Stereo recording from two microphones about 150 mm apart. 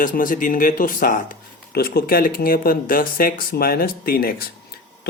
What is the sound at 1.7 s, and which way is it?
Speech, 90° left.